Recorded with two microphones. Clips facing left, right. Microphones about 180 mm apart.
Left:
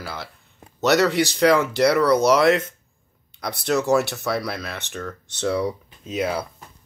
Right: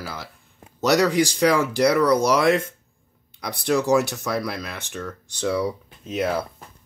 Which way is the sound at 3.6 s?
15° right (ahead or behind).